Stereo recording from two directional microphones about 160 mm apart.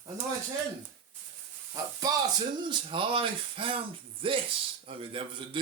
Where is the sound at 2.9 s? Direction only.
30° right (ahead or behind).